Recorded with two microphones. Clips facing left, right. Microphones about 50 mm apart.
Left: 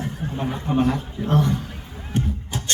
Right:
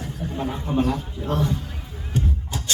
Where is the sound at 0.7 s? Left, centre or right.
Left.